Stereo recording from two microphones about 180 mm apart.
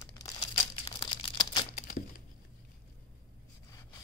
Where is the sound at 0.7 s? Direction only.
25° left (ahead or behind).